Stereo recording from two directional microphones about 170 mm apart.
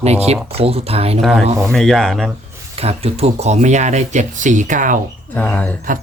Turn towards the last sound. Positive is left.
turn(degrees=10)  # may be behind; listen again after turning